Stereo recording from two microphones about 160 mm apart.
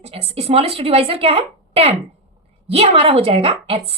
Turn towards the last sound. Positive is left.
turn(degrees=-35)  # may be behind; listen again after turning